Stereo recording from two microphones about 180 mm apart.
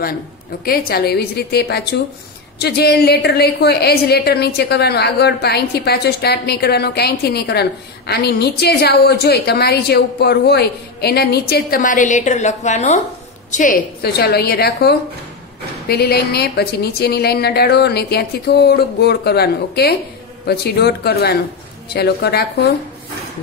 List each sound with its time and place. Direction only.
0.7 s a woman's voice: 60° left (ahead or behind)